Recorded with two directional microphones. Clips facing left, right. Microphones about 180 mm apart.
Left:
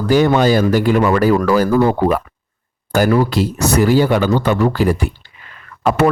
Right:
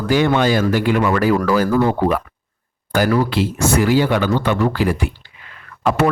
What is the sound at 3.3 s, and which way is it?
Speech, 40° left (ahead or behind).